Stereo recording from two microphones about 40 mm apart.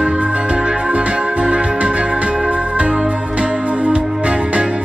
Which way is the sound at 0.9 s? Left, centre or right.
Right.